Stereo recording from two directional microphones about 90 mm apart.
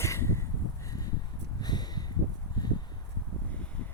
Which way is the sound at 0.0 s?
30° left (ahead or behind).